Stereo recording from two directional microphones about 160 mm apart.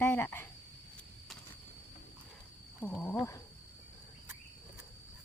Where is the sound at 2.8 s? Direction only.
15° left (ahead or behind).